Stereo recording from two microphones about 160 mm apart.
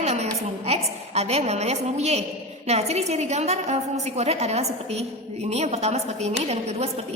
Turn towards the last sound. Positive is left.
turn(degrees=-40)  # may be behind; listen again after turning